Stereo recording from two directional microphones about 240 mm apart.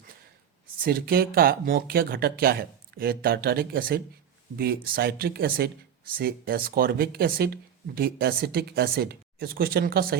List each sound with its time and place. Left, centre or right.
0.9 s speech: right